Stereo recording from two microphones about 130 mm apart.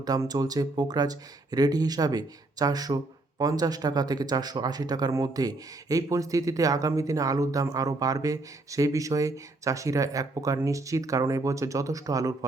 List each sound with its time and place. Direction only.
0.0 s speech: 30° right (ahead or behind)